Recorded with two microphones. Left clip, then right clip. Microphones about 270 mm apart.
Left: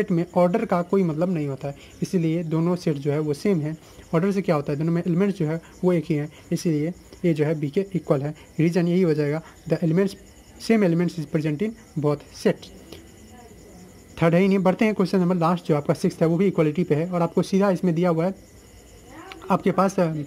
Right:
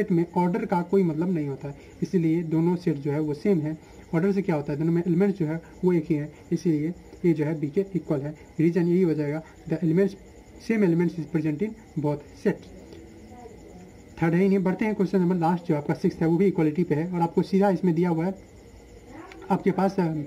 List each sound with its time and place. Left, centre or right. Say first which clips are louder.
0.0 s a man's voice: left 4 dB; centre
14.1 s a man's voice: left 4 dB; centre
19.2 s bird: left 3 dB; centre